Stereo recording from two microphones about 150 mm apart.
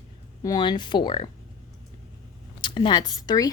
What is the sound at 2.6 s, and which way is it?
Speech, 30° left (ahead or behind).